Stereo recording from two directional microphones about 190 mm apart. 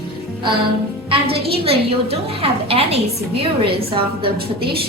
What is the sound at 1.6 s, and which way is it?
A woman's voice, 30° right (ahead or behind).